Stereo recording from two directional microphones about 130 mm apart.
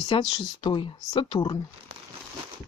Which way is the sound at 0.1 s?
40° left (ahead or behind).